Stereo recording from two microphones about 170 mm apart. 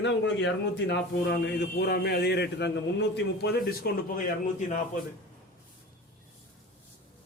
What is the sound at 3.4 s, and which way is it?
Speech, 70° left (ahead or behind).